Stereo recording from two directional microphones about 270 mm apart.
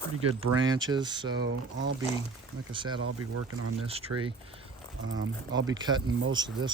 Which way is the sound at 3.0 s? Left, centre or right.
Right.